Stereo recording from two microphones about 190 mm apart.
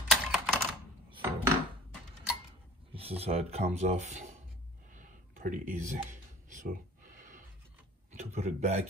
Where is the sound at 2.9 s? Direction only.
30° right (ahead or behind).